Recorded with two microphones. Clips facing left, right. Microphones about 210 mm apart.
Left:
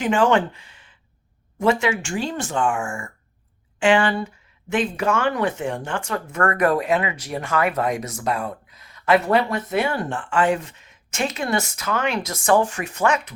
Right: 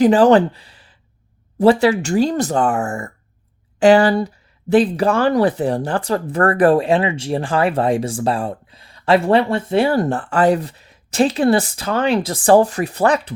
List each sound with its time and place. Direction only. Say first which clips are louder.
0.0 s speech: right 8 dB; 35° right (ahead or behind)